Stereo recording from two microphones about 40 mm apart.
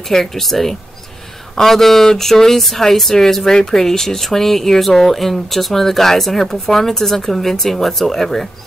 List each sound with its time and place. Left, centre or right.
0.1 s speech: centre